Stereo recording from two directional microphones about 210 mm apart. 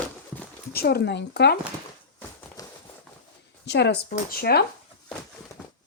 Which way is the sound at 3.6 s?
55° left (ahead or behind).